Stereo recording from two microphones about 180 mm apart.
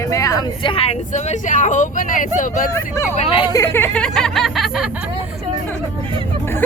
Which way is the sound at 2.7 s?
15° left (ahead or behind).